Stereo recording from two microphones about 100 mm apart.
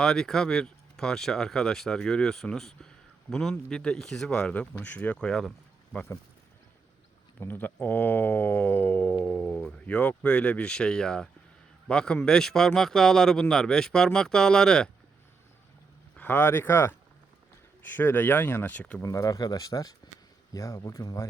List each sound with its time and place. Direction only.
0.0 s speech: 5° left (ahead or behind)
7.3 s speech: 20° left (ahead or behind)
16.1 s speech: 20° left (ahead or behind)
19.0 s speech: 35° left (ahead or behind)